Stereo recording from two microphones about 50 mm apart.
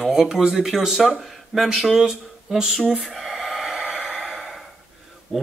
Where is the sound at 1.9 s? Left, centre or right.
Centre.